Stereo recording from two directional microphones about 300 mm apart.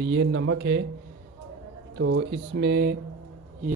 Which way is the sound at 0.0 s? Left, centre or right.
Right.